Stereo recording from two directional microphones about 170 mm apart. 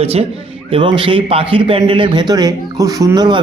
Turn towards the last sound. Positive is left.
turn(degrees=-25)  # may be behind; listen again after turning